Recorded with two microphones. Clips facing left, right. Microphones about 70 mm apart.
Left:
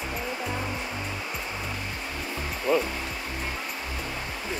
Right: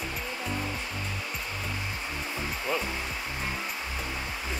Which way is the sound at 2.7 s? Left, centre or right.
Centre.